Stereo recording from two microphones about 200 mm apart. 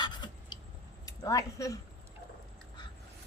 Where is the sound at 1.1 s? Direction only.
15° left (ahead or behind).